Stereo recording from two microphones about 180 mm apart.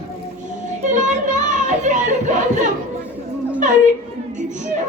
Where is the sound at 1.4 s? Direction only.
45° right (ahead or behind).